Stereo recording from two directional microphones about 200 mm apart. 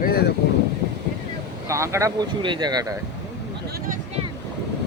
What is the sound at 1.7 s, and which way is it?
Speech, 15° right (ahead or behind).